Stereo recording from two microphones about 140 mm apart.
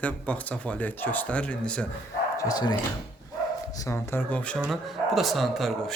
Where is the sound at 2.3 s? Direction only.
25° left (ahead or behind).